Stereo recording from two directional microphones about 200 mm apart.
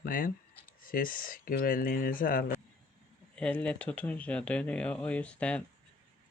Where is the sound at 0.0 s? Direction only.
45° left (ahead or behind).